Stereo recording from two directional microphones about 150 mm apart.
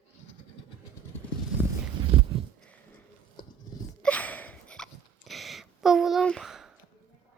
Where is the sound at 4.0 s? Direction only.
10° left (ahead or behind).